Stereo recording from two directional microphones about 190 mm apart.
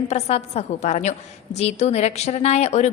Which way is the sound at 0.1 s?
35° left (ahead or behind).